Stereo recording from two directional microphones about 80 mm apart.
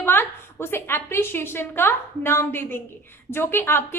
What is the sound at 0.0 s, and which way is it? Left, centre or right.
A woman's voice, left.